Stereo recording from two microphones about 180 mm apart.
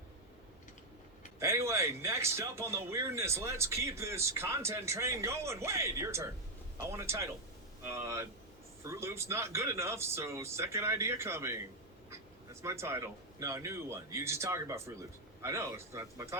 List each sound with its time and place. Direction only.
1.4 s a man's voice: 15° right (ahead or behind)
12.6 s a man's voice: 15° right (ahead or behind)